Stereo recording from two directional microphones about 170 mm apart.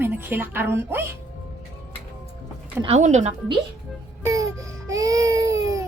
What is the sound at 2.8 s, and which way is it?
Speech, 40° right (ahead or behind).